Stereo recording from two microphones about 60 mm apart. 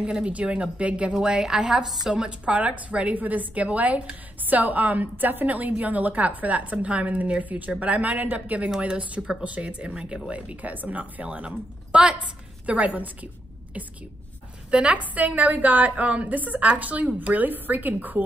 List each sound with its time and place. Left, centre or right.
0.0 s a woman's voice: centre
8.6 s a woman's voice: centre
14.7 s a woman's voice: centre